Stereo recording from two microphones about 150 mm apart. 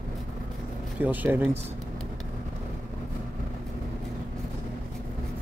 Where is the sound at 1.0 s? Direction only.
10° right (ahead or behind).